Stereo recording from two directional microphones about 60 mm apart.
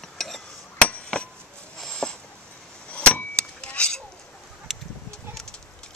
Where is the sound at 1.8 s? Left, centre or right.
Centre.